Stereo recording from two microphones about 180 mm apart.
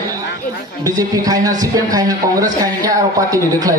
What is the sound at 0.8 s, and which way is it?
Speech, 20° right (ahead or behind).